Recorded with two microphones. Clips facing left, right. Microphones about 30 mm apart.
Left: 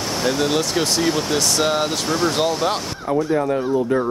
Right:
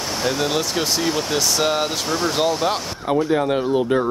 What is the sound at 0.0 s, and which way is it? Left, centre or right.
Speech, centre.